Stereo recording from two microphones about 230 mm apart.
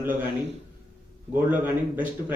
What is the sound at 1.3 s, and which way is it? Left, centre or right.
Speech, centre.